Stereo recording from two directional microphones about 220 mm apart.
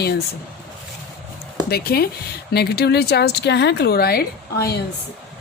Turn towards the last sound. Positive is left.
turn(degrees=45)  # may be behind; listen again after turning